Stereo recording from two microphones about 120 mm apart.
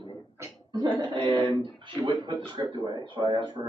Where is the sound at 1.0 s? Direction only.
40° right (ahead or behind).